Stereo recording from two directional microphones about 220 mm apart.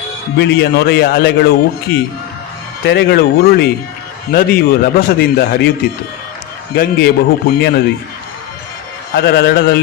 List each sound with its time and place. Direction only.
0.3 s speech: 50° left (ahead or behind)
6.7 s speech: 45° left (ahead or behind)
9.1 s speech: 45° left (ahead or behind)